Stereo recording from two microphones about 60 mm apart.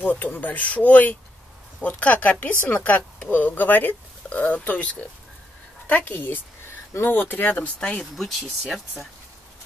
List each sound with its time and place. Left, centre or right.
0.0 s speech: left
5.9 s speech: left
8.2 s speech: centre